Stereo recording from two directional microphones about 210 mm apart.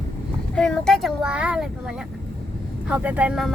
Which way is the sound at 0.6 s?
5° left (ahead or behind).